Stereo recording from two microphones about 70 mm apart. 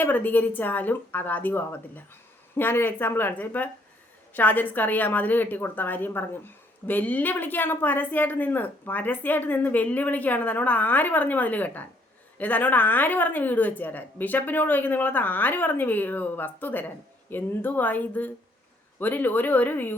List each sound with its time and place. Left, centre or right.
0.0 s a woman's voice: left